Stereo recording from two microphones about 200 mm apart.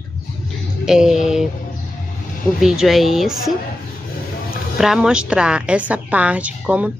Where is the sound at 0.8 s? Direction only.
5° right (ahead or behind).